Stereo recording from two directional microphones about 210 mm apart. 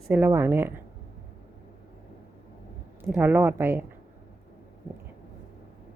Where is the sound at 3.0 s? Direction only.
10° right (ahead or behind).